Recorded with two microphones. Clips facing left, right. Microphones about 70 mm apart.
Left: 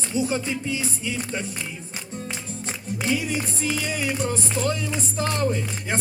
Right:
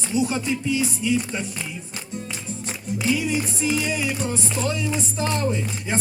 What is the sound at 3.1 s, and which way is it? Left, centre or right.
Music, left.